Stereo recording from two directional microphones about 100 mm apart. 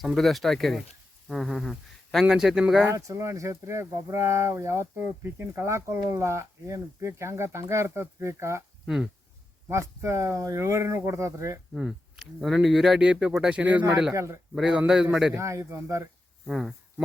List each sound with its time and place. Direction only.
0.0 s speech: centre (ahead or behind)
2.9 s speech: 30° right (ahead or behind)
9.6 s speech: 30° right (ahead or behind)
11.7 s speech: 5° right (ahead or behind)
14.1 s speech: 30° right (ahead or behind)
14.5 s a man's voice: 5° right (ahead or behind)
15.3 s speech: 30° right (ahead or behind)
16.5 s speech: centre (ahead or behind)